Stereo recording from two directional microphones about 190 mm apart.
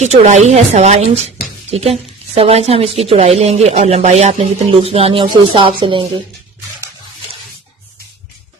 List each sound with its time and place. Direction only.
0.0 s a woman's voice: 35° right (ahead or behind)